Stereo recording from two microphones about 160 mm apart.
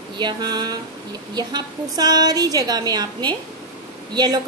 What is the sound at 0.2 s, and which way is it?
A woman's voice, 25° right (ahead or behind).